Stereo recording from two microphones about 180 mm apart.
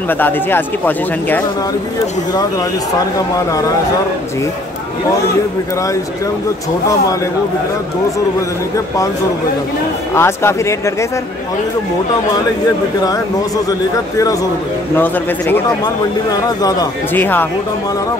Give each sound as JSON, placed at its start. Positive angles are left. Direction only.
{"t": 0.2, "sound": "speech", "side_deg": 10}
{"t": 10.1, "sound": "speech", "side_deg": 15}
{"t": 13.7, "sound": "speech", "side_deg": 20}